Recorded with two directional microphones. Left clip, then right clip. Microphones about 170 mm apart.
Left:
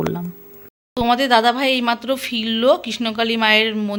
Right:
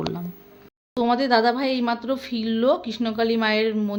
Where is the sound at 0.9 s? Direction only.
Centre (ahead or behind).